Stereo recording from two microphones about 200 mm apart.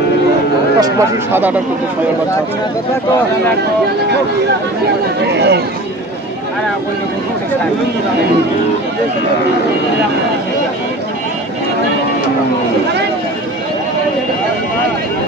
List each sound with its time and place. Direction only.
0.7 s speech: 15° right (ahead or behind)
5.3 s speech: 55° right (ahead or behind)